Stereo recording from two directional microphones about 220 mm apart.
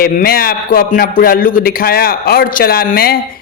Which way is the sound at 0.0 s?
40° left (ahead or behind).